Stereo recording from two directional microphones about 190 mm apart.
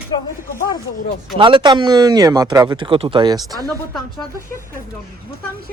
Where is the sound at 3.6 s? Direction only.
Centre (ahead or behind).